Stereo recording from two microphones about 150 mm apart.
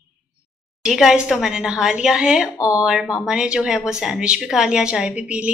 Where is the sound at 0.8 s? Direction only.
5° right (ahead or behind).